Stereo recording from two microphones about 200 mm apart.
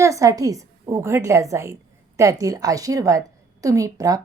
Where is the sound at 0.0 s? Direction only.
15° right (ahead or behind).